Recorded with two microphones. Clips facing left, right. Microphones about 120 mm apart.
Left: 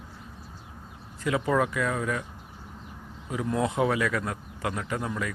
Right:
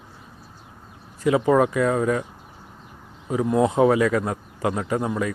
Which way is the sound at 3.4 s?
25° right (ahead or behind).